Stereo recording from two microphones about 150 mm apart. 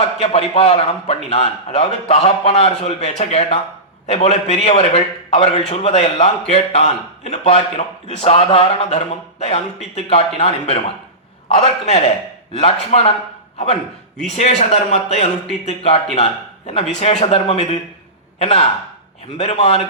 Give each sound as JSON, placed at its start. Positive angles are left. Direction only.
{"t": 0.2, "sound": "a man's voice", "side_deg": 40}
{"t": 14.3, "sound": "a man's voice", "side_deg": 45}